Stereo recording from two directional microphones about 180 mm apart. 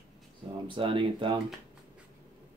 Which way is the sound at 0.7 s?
30° right (ahead or behind).